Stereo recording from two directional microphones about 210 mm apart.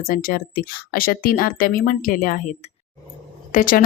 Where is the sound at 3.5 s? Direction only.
40° left (ahead or behind).